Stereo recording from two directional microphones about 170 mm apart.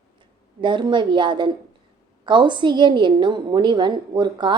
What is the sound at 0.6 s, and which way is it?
A woman's voice, 30° right (ahead or behind).